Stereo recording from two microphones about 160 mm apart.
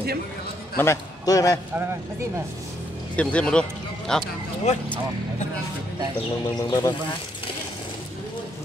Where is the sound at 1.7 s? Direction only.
15° right (ahead or behind).